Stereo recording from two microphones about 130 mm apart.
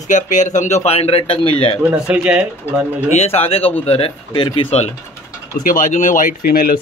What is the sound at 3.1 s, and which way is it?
A man's voice, 55° left (ahead or behind).